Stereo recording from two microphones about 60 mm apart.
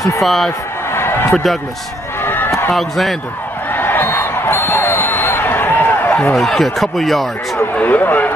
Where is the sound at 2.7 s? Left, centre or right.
Centre.